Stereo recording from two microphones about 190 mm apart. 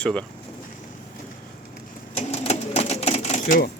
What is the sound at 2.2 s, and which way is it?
Sewing machine, 35° left (ahead or behind).